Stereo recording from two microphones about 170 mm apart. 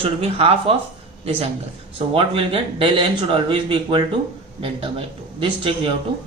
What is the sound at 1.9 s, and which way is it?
Speech, 30° right (ahead or behind).